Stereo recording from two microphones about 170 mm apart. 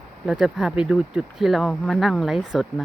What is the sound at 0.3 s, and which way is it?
Speech, 5° right (ahead or behind).